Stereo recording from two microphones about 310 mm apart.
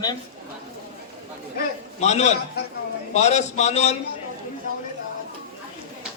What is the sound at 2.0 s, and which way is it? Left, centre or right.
Speech, left.